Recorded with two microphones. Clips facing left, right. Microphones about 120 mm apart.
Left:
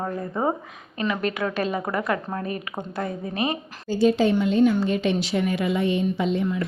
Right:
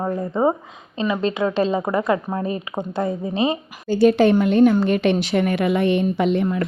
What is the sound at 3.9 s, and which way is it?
Speech, 65° right (ahead or behind).